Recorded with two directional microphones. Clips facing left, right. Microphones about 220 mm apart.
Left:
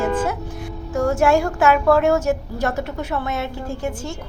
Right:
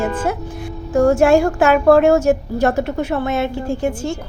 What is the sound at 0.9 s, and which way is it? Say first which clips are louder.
A woman's voice: right 5 dB; 30° right (ahead or behind).